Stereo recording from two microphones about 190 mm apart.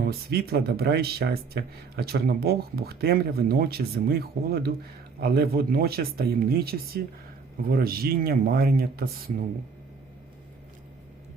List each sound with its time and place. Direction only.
0.0 s speech: 55° right (ahead or behind)